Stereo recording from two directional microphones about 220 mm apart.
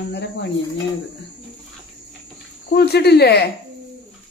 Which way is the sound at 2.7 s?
45° left (ahead or behind).